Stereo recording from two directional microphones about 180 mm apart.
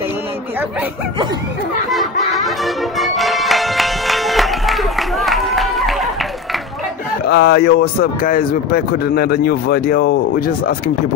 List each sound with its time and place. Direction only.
1.9 s music: centre (ahead or behind)
7.2 s speech: 65° left (ahead or behind)